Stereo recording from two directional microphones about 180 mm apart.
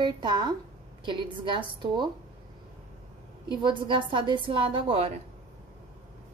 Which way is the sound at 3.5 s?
25° right (ahead or behind).